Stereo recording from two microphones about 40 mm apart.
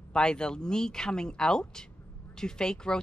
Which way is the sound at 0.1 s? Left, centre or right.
Left.